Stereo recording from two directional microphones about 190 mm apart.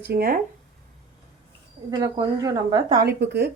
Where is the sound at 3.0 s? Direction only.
60° right (ahead or behind).